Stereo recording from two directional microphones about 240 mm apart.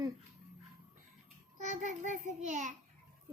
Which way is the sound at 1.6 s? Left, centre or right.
Right.